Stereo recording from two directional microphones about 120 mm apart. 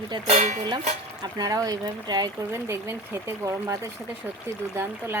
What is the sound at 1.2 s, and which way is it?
Speech, 30° right (ahead or behind).